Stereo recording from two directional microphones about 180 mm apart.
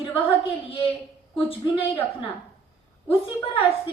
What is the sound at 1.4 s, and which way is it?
Speech, 30° left (ahead or behind).